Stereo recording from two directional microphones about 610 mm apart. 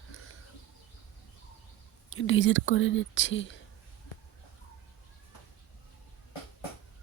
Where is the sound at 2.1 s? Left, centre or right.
Centre.